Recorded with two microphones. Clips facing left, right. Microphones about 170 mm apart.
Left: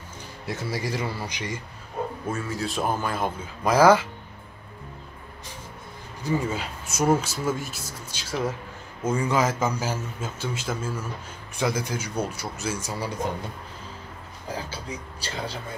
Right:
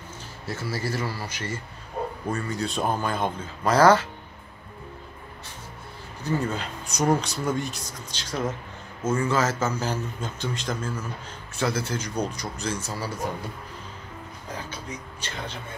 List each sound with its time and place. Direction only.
0.5 s a man's voice: 15° left (ahead or behind)
2.2 s speech: 5° left (ahead or behind)
6.2 s a man's voice: 10° left (ahead or behind)
14.5 s speech: 30° left (ahead or behind)